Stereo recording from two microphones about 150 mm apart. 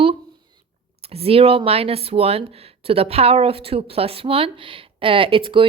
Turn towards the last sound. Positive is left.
turn(degrees=-35)  # may be behind; listen again after turning